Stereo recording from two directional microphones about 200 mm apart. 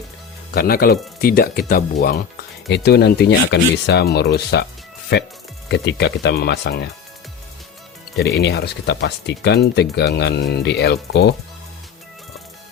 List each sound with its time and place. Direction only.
0.5 s speech: 50° left (ahead or behind)
2.6 s speech: 55° left (ahead or behind)
8.4 s speech: 55° left (ahead or behind)